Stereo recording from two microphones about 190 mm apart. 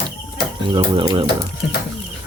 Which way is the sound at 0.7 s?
25° right (ahead or behind).